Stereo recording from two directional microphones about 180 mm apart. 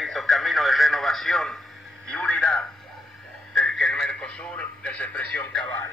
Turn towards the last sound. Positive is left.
turn(degrees=10)  # may be behind; listen again after turning